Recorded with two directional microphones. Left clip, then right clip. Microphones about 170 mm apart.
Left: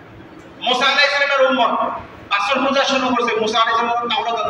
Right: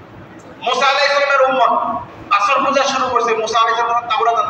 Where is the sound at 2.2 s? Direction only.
20° left (ahead or behind).